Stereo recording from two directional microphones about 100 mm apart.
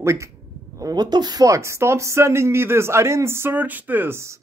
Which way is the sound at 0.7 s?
40° right (ahead or behind).